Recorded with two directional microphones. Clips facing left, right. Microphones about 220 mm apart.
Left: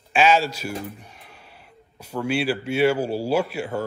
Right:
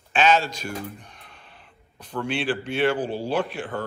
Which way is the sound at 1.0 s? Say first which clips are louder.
Left 2 dB; 10° left (ahead or behind).